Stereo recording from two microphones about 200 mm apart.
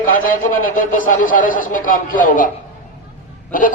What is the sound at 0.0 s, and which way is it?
A man's voice, 45° left (ahead or behind).